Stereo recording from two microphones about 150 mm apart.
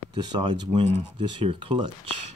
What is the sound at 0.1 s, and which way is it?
Speech, 30° right (ahead or behind).